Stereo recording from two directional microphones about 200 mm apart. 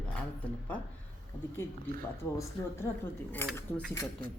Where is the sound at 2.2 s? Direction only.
15° left (ahead or behind).